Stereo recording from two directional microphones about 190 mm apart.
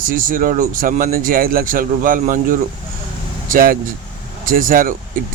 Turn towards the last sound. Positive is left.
turn(degrees=-45)  # may be behind; listen again after turning